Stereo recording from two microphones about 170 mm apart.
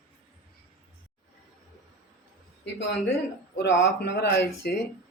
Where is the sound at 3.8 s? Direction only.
85° left.